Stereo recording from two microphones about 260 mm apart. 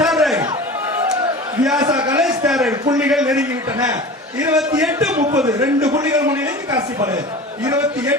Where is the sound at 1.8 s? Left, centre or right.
Centre.